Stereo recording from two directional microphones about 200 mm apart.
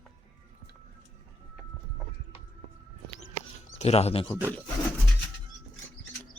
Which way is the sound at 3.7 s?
30° left (ahead or behind).